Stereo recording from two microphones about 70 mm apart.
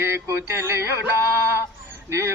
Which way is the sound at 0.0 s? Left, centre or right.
Right.